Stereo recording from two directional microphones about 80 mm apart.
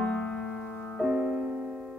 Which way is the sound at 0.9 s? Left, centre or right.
Centre.